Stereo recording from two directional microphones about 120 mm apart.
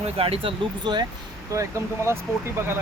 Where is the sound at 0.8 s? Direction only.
40° right (ahead or behind).